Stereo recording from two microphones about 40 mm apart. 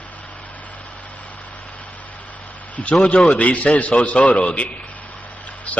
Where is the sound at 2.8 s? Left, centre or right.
Centre.